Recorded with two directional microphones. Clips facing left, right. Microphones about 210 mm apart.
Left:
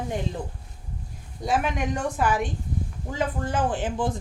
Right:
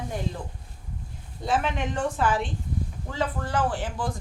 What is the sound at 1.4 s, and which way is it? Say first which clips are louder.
Speech: left 1 dB; 15° left (ahead or behind).